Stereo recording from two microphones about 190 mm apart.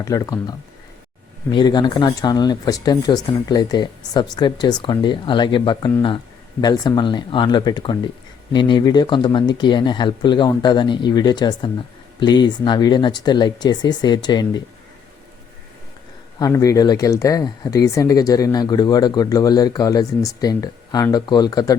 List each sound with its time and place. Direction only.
0.0 s speech: 20° left (ahead or behind)
16.4 s speech: 20° left (ahead or behind)